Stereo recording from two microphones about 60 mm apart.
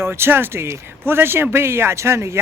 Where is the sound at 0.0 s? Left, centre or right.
Right.